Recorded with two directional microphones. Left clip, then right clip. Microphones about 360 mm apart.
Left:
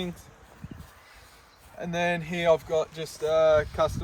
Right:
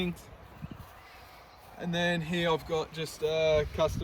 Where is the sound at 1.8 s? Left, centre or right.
Centre.